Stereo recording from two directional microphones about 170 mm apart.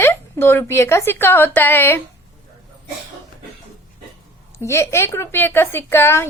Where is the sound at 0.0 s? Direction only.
15° left (ahead or behind).